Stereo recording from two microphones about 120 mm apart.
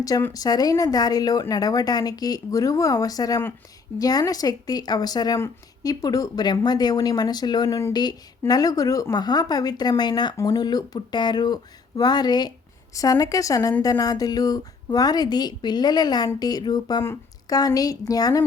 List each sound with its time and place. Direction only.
0.3 s a woman's voice: 30° left (ahead or behind)